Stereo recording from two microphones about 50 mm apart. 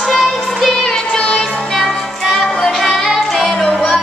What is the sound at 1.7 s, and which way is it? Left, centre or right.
Music, centre.